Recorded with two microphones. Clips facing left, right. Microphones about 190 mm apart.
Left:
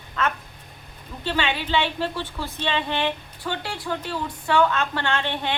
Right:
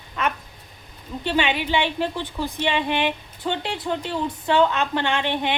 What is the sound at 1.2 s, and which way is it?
Speech, 15° right (ahead or behind).